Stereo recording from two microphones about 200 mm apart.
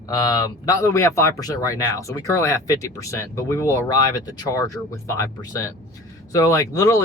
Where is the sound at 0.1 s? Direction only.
20° left (ahead or behind).